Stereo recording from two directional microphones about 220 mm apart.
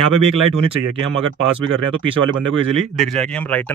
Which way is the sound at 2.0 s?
60° right (ahead or behind).